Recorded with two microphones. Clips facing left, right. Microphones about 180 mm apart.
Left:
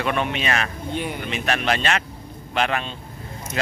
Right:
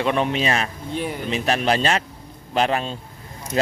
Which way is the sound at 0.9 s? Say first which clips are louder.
Right 1 dB; centre (ahead or behind).